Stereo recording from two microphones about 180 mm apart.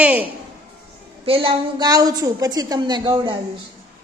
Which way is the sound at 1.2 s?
30° right (ahead or behind).